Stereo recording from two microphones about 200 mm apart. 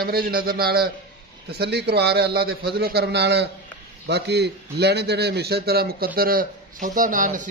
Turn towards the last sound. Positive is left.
turn(degrees=-40)  # may be behind; listen again after turning